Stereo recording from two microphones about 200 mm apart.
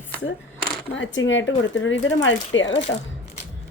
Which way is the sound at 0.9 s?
70° left (ahead or behind).